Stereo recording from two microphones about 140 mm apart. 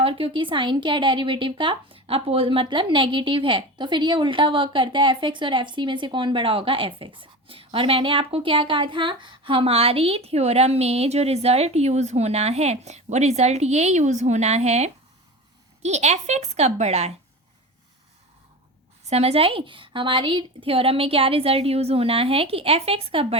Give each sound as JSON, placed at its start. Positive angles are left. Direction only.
{"t": 0.0, "sound": "a woman's voice", "side_deg": -40}
{"t": 19.0, "sound": "a woman's voice", "side_deg": -50}